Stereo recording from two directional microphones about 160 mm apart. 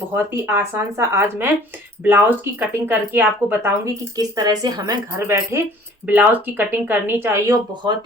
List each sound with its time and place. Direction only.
0.4 s speech: 15° right (ahead or behind)
4.2 s speech: 25° right (ahead or behind)